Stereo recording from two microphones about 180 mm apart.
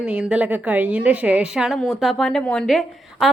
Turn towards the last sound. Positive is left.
turn(degrees=0)  # may be behind; listen again after turning